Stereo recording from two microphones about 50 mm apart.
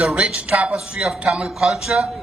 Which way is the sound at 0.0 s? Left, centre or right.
Centre.